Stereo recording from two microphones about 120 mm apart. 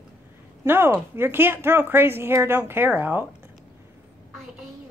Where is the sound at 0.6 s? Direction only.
20° right (ahead or behind).